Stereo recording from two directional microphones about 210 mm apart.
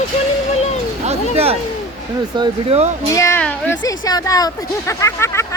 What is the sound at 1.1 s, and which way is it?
Speech, 30° right (ahead or behind).